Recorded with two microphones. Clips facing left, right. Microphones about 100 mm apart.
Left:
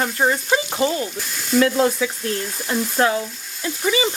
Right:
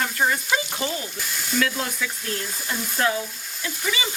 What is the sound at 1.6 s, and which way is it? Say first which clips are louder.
Speech: left 10 dB; 30° left (ahead or behind).